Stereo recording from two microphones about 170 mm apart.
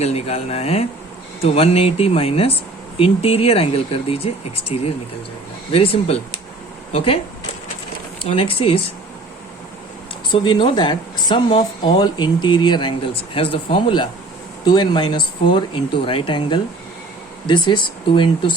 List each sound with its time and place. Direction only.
0.0 s speech: 35° left (ahead or behind)
8.2 s speech: 35° left (ahead or behind)
10.4 s speech: 30° left (ahead or behind)